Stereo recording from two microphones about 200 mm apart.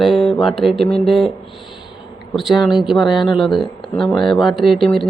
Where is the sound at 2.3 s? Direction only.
Centre (ahead or behind).